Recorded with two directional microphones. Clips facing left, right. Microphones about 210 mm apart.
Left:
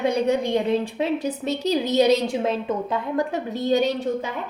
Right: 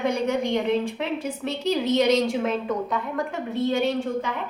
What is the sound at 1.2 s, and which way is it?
A woman's voice, 35° left (ahead or behind).